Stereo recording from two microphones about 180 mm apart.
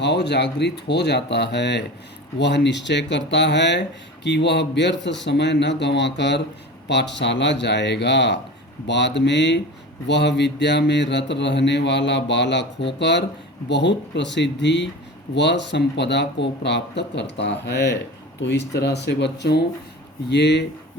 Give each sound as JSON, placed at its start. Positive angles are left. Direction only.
{"t": 0.0, "sound": "speech", "side_deg": 70}